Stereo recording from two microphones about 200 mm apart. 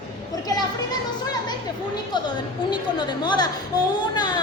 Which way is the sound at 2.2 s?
20° left (ahead or behind).